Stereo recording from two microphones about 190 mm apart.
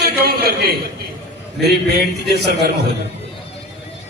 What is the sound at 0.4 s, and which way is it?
A man's voice, 55° right (ahead or behind).